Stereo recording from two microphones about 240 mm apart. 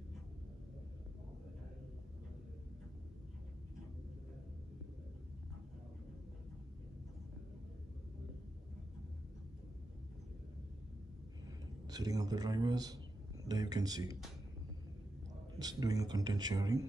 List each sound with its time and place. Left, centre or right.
11.9 s a man's voice: centre
15.6 s speech: centre